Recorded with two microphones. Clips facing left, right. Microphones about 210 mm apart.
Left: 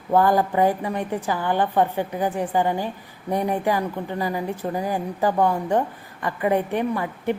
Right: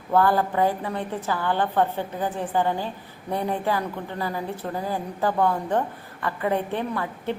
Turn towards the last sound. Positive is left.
turn(degrees=15)  # may be behind; listen again after turning